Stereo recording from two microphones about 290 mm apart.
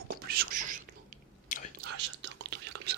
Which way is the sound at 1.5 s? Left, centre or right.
Left.